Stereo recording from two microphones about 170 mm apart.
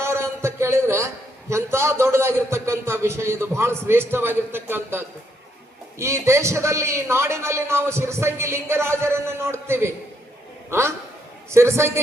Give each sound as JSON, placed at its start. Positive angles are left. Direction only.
{"t": 0.0, "sound": "a man's voice", "side_deg": -15}